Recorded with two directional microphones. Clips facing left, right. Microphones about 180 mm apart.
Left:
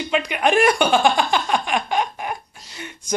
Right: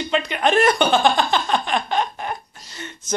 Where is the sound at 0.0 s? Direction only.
10° left (ahead or behind).